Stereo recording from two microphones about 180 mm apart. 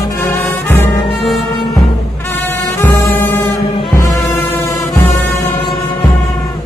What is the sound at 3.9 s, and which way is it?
Music, 15° left (ahead or behind).